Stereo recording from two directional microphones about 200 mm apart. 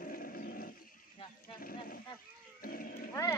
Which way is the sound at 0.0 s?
45° left (ahead or behind).